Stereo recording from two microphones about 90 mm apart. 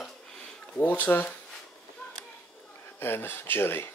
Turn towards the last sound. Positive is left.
turn(degrees=25)  # may be behind; listen again after turning